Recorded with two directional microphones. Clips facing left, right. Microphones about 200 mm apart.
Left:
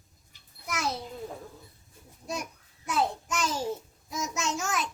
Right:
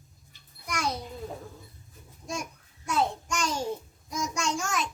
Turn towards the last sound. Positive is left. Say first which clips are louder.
# right 1 dB
turn(degrees=5)  # may be behind; listen again after turning